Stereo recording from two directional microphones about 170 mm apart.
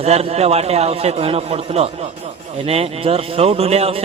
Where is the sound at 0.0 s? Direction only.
35° right (ahead or behind).